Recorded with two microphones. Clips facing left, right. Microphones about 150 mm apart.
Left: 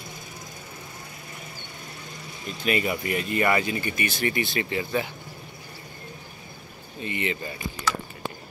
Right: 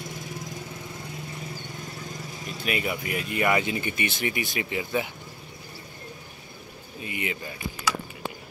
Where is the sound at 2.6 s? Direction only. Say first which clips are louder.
Left 4 dB; 5° right (ahead or behind).